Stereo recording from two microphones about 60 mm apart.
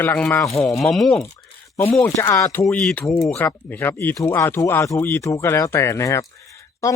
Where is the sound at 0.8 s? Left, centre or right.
Centre.